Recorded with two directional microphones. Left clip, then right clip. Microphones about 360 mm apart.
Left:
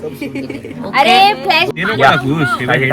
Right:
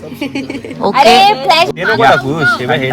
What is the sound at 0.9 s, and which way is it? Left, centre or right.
Speech, centre.